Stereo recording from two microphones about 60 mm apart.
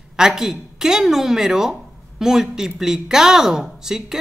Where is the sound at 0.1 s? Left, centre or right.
Centre.